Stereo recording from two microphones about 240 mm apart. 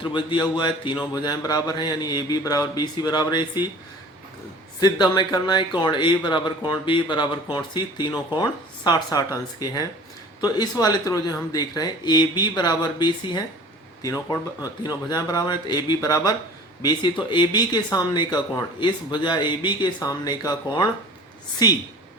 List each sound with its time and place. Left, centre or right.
0.0 s speech: centre
4.8 s speech: centre